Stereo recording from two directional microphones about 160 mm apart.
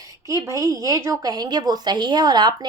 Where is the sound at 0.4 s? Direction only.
20° right (ahead or behind).